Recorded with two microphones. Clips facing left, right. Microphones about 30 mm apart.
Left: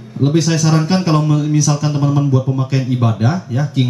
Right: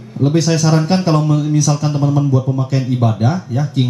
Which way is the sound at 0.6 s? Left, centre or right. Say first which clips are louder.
Right 1 dB; centre.